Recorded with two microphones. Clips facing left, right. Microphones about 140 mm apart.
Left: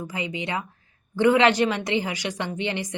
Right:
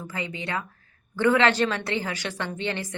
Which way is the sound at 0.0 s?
15° left (ahead or behind).